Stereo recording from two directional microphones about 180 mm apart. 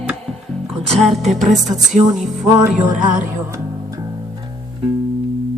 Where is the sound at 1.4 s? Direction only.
40° right (ahead or behind).